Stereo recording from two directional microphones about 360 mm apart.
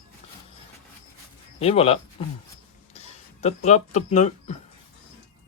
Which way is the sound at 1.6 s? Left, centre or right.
Centre.